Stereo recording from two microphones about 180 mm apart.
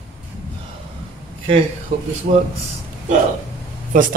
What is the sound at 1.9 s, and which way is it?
Speech, 35° right (ahead or behind).